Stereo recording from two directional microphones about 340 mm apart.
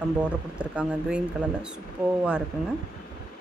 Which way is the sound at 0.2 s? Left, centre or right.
Centre.